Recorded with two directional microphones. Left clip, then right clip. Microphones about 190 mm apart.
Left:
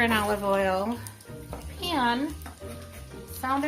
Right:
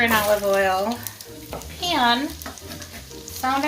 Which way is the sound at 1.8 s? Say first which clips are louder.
Right 7 dB; 45° left (ahead or behind).